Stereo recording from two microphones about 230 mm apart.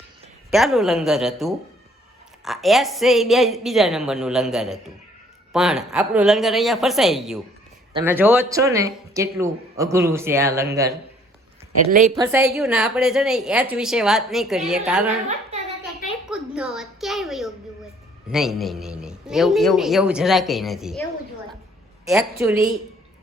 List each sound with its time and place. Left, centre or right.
0.5 s a man's voice: centre
11.9 s a woman's voice: right
12.1 s speech: centre
12.4 s a man's voice: centre
16.3 s a sound: centre
18.3 s a man's voice: centre
22.0 s a man's voice: centre